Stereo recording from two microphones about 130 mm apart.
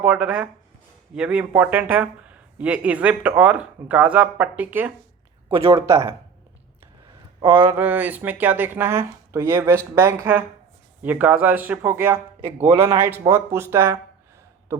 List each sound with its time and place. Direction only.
0.0 s speech: 10° right (ahead or behind)
5.5 s speech: 40° right (ahead or behind)
5.7 s speech: 25° right (ahead or behind)
7.4 s speech: 25° right (ahead or behind)
7.8 s speech: 15° right (ahead or behind)